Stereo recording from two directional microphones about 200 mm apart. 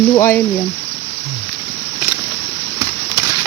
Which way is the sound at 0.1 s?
15° left (ahead or behind).